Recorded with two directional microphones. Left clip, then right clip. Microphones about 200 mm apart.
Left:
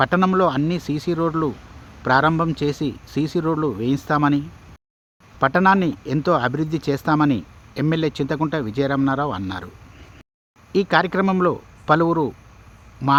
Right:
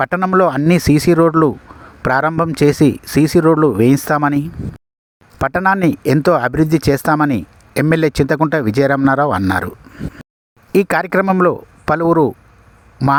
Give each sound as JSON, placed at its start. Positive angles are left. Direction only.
{"t": 0.0, "sound": "speech", "side_deg": -40}
{"t": 10.7, "sound": "speech", "side_deg": -45}